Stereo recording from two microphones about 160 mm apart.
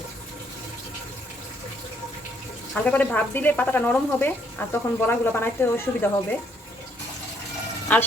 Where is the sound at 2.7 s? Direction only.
10° left (ahead or behind).